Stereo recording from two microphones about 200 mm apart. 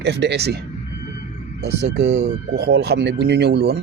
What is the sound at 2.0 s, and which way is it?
Speech, 35° right (ahead or behind).